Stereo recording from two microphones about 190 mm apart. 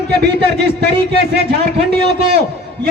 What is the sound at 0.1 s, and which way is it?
A man's voice, 60° right (ahead or behind).